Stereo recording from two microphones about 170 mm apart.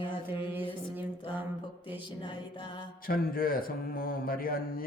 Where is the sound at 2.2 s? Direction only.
30° left (ahead or behind).